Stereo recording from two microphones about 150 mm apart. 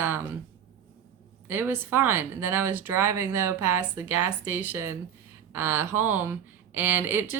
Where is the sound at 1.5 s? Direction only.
15° right (ahead or behind).